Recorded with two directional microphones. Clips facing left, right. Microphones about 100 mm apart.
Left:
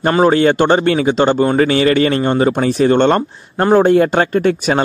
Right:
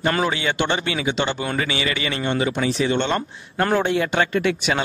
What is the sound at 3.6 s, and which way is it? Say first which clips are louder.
Speech: left 9 dB; 40° left (ahead or behind).